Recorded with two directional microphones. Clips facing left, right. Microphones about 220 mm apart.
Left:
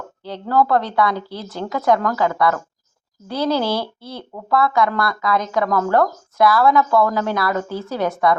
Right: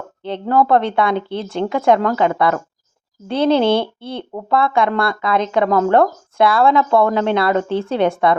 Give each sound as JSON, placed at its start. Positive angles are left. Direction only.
{"t": 0.4, "sound": "speech", "side_deg": -20}